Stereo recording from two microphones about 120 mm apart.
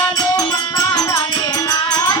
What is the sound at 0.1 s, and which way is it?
Music, 35° left (ahead or behind).